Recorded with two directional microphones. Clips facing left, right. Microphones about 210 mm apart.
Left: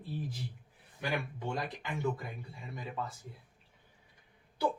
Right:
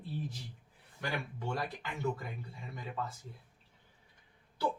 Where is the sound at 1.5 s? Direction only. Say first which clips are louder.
Left 1 dB; 20° left (ahead or behind).